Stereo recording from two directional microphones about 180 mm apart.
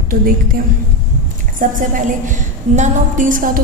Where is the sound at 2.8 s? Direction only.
45° right (ahead or behind).